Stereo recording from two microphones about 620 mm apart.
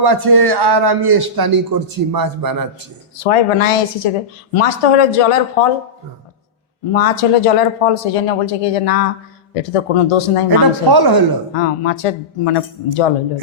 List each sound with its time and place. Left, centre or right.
0.0 s a man's voice: right
3.2 s speech: left
6.9 s speech: left
10.8 s a man's voice: right
11.5 s speech: left